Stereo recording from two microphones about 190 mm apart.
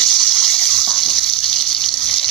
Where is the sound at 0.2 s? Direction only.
Centre (ahead or behind).